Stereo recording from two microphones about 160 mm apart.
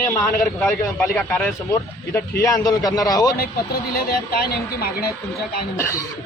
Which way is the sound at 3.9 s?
75° left (ahead or behind).